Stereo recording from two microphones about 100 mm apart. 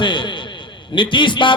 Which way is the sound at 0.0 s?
50° left (ahead or behind).